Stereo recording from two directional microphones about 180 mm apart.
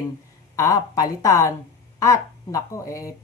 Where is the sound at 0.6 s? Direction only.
20° left (ahead or behind).